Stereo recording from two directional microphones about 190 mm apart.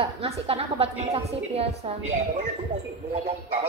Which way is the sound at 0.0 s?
30° right (ahead or behind).